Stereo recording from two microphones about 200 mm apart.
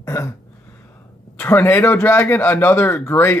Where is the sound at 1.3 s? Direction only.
10° left (ahead or behind).